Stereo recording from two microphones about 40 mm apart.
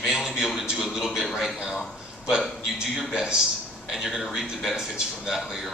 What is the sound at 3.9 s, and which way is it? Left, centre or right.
Speech, centre.